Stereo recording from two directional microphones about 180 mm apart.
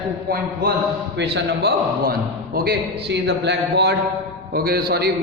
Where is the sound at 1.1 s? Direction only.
70° right (ahead or behind).